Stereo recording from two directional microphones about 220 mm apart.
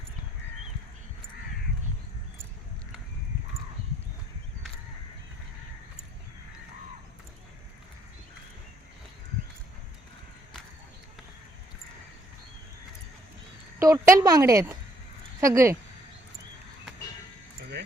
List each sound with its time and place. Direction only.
13.7 s speech: 10° right (ahead or behind)